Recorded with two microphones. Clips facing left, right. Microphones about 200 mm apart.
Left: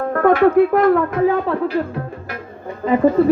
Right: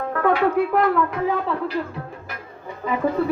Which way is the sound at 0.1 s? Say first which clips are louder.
Left 7 dB; 50° left (ahead or behind).